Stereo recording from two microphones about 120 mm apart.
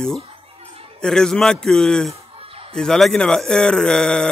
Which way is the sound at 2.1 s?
50° right (ahead or behind).